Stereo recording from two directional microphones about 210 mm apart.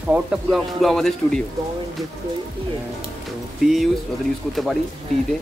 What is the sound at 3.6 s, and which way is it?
Speech, centre (ahead or behind).